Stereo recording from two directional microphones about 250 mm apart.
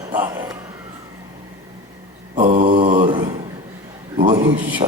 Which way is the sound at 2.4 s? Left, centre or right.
Right.